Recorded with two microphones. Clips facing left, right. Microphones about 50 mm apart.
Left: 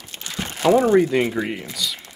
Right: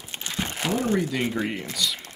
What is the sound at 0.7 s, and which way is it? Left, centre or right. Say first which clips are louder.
Speech: left 10 dB; left.